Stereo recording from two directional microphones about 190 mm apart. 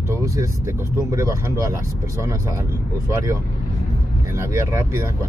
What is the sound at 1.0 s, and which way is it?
Speech, 15° right (ahead or behind).